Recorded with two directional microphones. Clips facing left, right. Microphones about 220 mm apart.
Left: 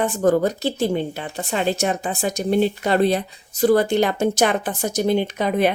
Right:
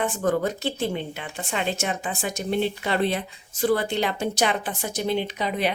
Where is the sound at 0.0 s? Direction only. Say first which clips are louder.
Left 6 dB; 40° left (ahead or behind).